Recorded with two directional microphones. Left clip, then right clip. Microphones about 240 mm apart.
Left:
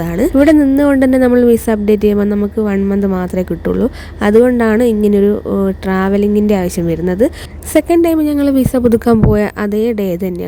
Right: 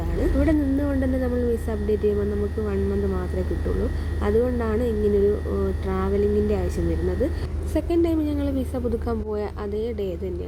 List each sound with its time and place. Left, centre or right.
0.4 s a woman's voice: left